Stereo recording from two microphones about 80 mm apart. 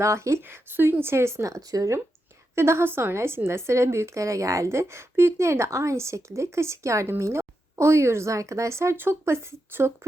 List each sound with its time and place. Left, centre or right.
0.0 s a woman's voice: right
2.6 s a woman's voice: right